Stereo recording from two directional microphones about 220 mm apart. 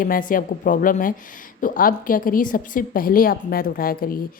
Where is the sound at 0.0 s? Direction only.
40° left (ahead or behind).